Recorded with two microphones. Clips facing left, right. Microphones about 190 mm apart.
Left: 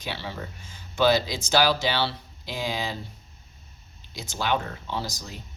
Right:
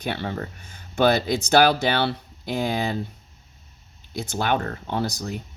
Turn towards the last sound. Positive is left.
turn(degrees=-60)  # may be behind; listen again after turning